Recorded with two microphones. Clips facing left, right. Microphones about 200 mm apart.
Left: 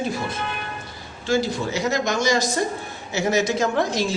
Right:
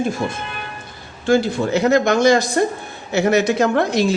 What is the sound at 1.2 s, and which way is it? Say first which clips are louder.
Speech: right 6 dB; 55° right (ahead or behind).